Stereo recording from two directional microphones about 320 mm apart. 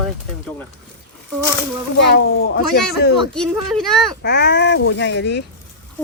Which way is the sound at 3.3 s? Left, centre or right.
Centre.